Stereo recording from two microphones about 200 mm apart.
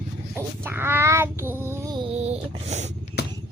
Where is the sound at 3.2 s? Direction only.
55° left (ahead or behind).